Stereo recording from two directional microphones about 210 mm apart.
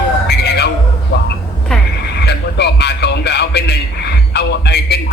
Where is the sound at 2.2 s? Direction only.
50° left (ahead or behind).